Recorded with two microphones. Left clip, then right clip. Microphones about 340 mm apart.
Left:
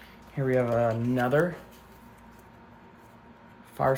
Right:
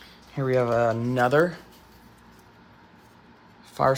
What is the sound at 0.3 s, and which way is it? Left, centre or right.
Speech, centre.